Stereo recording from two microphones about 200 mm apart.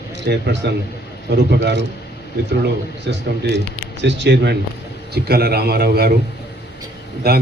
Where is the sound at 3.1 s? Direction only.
60° right (ahead or behind).